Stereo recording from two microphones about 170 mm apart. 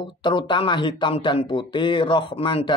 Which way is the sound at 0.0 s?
30° left (ahead or behind).